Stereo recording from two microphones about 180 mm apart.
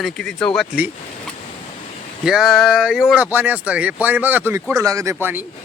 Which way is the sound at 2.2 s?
Centre (ahead or behind).